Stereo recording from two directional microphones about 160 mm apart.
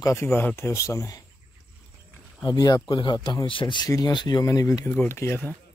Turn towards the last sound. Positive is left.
turn(degrees=15)  # may be behind; listen again after turning